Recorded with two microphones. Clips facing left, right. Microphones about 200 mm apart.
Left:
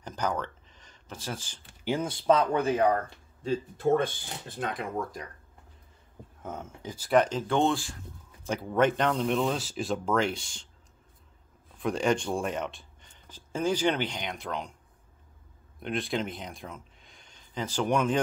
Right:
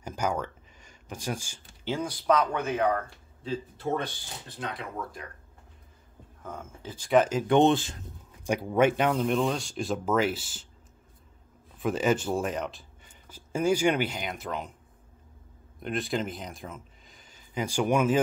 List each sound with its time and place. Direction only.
0.0 s speech: 10° right (ahead or behind)
1.9 s speech: 25° left (ahead or behind)
3.4 s speech: 50° left (ahead or behind)
6.4 s speech: 20° left (ahead or behind)
7.0 s speech: centre (ahead or behind)
11.8 s speech: 5° right (ahead or behind)
15.8 s speech: centre (ahead or behind)